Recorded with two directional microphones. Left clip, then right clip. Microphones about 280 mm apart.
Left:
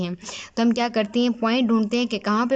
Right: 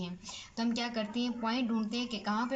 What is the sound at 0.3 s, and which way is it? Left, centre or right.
Speech, left.